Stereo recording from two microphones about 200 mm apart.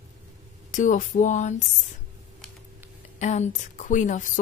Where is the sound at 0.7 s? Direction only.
40° left (ahead or behind).